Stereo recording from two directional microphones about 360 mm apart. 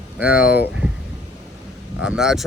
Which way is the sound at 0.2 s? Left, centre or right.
Centre.